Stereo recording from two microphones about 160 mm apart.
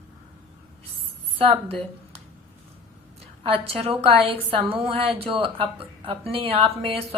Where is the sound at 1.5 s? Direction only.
35° right (ahead or behind).